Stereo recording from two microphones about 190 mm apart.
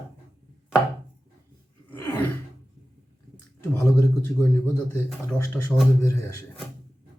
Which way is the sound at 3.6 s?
10° left (ahead or behind).